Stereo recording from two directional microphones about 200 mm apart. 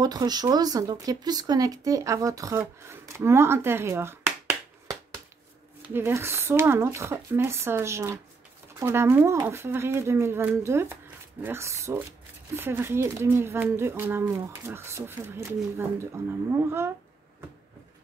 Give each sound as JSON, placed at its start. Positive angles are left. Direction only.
{"t": 0.0, "sound": "speech", "side_deg": -20}
{"t": 2.6, "sound": "a sound", "side_deg": -10}
{"t": 5.8, "sound": "speech", "side_deg": -10}